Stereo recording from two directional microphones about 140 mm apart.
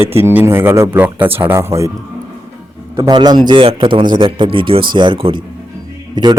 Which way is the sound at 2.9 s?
35° right (ahead or behind).